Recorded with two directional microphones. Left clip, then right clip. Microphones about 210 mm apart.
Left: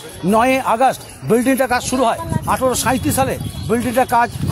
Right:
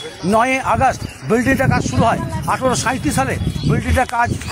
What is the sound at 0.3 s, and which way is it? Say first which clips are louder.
A man's voice: left 1 dB; 35° left (ahead or behind).